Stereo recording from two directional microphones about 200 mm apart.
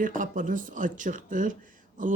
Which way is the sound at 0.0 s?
40° right (ahead or behind).